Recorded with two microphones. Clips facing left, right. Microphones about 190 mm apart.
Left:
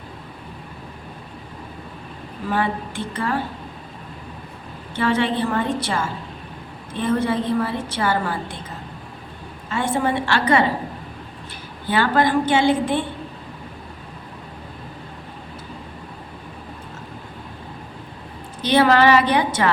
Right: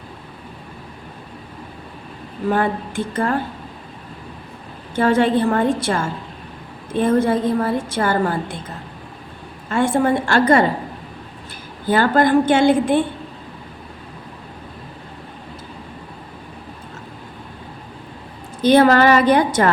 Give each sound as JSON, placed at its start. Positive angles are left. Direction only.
{"t": 2.5, "sound": "a woman's voice", "side_deg": -45}
{"t": 4.9, "sound": "a woman's voice", "side_deg": -45}
{"t": 9.6, "sound": "a woman's voice", "side_deg": -50}
{"t": 11.9, "sound": "a woman's voice", "side_deg": -45}
{"t": 18.6, "sound": "a woman's voice", "side_deg": -45}